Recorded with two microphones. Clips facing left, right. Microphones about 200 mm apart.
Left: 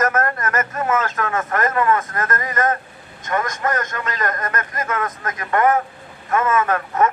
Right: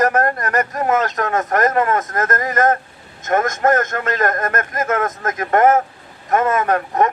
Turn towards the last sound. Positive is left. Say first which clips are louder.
# right 2 dB
turn(degrees=-40)  # may be behind; listen again after turning